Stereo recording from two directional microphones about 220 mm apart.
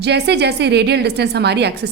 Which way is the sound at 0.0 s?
50° right (ahead or behind).